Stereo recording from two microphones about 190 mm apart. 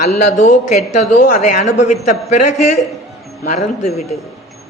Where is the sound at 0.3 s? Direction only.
40° left (ahead or behind).